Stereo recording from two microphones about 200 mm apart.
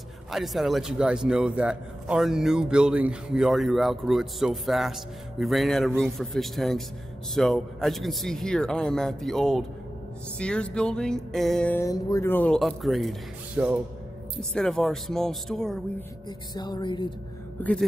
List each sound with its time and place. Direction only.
0.3 s a man's voice: centre (ahead or behind)
16.3 s music: 20° left (ahead or behind)
17.6 s speech: 10° left (ahead or behind)